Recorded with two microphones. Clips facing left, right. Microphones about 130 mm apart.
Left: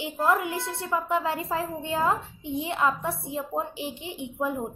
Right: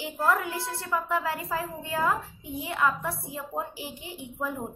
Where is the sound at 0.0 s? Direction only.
20° left (ahead or behind).